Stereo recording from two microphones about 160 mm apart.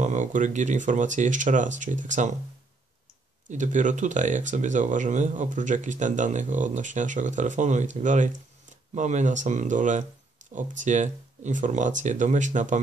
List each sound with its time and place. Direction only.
0.0 s speech: 50° right (ahead or behind)
3.4 s speech: 50° right (ahead or behind)